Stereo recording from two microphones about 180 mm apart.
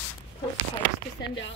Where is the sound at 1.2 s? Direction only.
90° left.